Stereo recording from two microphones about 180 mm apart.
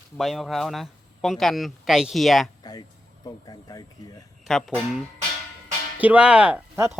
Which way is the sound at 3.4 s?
20° left (ahead or behind).